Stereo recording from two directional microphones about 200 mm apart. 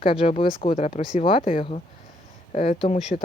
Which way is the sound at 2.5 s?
35° left (ahead or behind).